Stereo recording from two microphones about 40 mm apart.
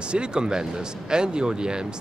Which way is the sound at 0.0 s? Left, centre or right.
Right.